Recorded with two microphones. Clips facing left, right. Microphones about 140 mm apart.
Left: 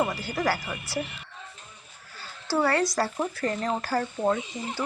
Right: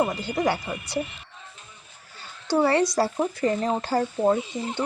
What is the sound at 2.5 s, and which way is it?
Speech, 20° right (ahead or behind).